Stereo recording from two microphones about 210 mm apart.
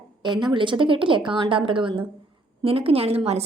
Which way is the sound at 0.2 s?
20° right (ahead or behind).